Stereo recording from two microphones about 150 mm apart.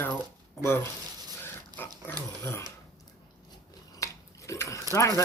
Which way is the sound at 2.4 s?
15° left (ahead or behind).